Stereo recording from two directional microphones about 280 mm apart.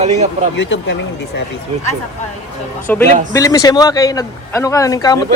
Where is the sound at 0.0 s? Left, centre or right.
Right.